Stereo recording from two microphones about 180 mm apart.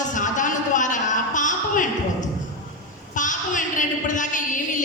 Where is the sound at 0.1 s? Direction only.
45° left (ahead or behind).